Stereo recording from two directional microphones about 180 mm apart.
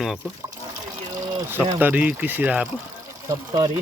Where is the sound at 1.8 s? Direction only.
10° right (ahead or behind).